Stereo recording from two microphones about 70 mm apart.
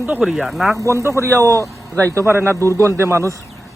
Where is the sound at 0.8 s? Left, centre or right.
Right.